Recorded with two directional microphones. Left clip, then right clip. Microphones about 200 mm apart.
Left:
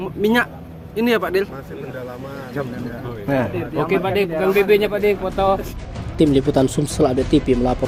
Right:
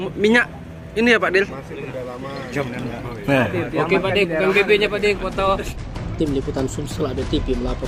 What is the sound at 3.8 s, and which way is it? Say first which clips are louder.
Speech: even; 35° left (ahead or behind).